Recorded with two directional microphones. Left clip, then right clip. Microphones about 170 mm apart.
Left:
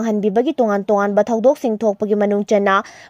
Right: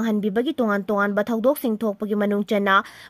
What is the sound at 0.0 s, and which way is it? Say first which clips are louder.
Speech: left 6 dB; 25° left (ahead or behind).